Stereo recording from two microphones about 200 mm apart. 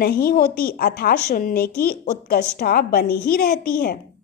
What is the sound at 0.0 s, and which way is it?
A woman's voice, 50° left (ahead or behind).